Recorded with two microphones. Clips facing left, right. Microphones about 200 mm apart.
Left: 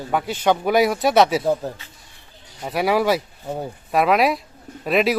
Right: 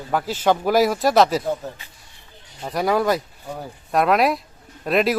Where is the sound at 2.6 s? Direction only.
5° left (ahead or behind).